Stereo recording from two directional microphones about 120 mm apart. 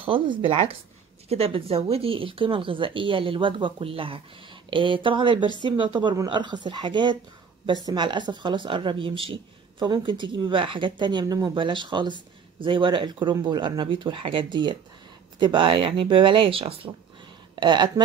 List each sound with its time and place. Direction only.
0.0 s speech: 45° right (ahead or behind)
17.6 s speech: 40° right (ahead or behind)